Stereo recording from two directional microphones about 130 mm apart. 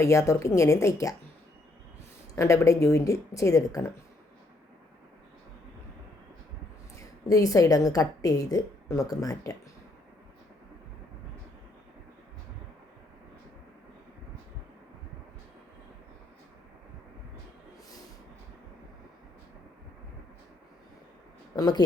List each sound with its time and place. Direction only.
0.0 s a woman's voice: 25° left (ahead or behind)
2.3 s a woman's voice: 20° left (ahead or behind)
7.3 s a woman's voice: 25° left (ahead or behind)
21.5 s speech: 30° left (ahead or behind)